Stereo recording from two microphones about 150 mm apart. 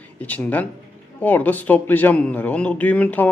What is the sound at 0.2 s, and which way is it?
A man's voice, 10° left (ahead or behind).